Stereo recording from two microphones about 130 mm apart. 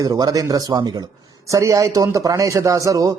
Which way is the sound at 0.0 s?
30° right (ahead or behind).